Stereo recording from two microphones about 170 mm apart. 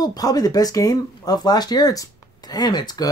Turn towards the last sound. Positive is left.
turn(degrees=25)  # may be behind; listen again after turning